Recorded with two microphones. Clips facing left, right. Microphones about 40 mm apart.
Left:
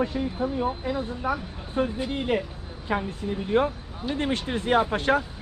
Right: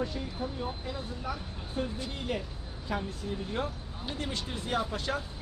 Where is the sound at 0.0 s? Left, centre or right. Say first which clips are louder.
Left 8 dB; left.